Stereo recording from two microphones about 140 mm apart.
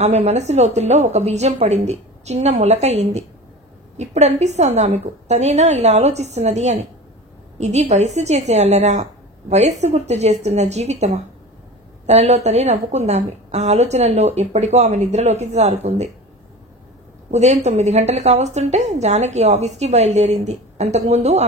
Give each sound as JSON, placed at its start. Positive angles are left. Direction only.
{"t": 0.0, "sound": "a woman's voice", "side_deg": -50}
{"t": 17.3, "sound": "a woman's voice", "side_deg": -55}